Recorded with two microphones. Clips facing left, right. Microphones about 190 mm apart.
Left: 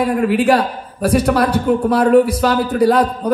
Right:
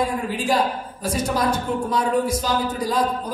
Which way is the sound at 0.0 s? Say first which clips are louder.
Left 9 dB; 65° left (ahead or behind).